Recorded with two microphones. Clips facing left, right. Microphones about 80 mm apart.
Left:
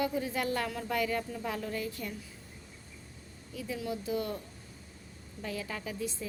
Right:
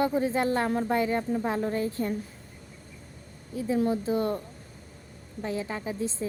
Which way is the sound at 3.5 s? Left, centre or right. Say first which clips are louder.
Right 10 dB; right.